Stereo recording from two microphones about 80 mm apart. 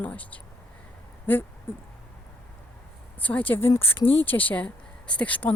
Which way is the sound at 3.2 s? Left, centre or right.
Left.